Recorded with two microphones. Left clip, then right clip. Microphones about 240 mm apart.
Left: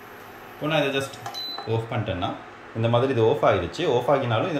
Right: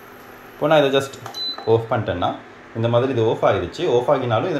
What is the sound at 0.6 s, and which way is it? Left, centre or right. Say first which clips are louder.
Speech: right 8 dB; centre.